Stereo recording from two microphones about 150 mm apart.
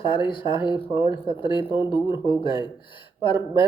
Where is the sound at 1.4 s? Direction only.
35° left (ahead or behind).